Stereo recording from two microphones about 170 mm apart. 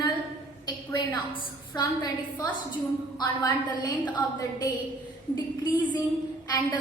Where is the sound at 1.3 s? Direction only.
25° left (ahead or behind).